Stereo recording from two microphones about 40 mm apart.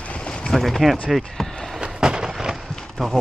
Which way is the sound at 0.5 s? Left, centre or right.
Centre.